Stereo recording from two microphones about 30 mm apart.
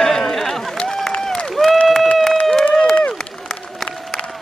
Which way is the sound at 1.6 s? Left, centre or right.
Left.